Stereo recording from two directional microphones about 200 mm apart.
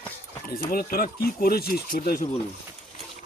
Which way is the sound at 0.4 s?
45° left (ahead or behind).